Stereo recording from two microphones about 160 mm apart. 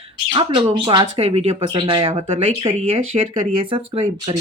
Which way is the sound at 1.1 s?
40° right (ahead or behind).